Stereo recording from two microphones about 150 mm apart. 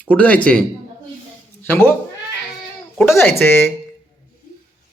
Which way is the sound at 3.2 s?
15° left (ahead or behind).